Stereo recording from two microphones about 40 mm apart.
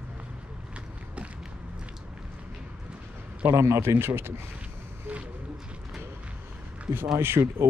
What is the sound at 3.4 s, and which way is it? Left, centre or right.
Speech, right.